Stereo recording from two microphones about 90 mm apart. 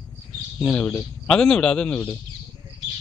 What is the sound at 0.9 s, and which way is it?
A man's voice, 10° left (ahead or behind).